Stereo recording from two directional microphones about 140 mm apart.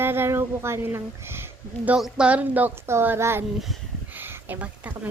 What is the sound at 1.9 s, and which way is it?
Speech, 5° right (ahead or behind).